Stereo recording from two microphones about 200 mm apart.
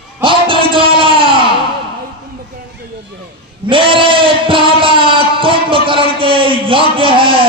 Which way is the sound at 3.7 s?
25° right (ahead or behind).